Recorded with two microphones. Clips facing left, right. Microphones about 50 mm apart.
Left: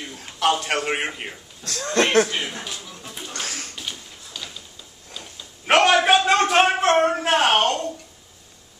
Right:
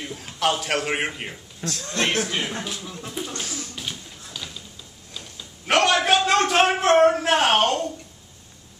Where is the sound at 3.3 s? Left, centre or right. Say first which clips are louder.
Left 1 dB; left.